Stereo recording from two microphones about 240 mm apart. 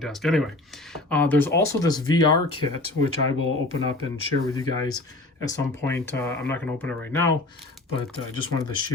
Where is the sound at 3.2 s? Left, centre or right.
Left.